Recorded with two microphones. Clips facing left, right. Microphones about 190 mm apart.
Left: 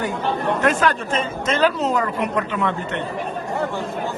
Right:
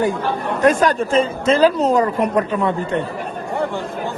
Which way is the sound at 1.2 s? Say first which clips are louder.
Right 5 dB; 30° right (ahead or behind).